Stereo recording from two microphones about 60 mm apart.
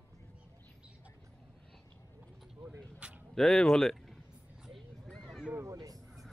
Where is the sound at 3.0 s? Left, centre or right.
Centre.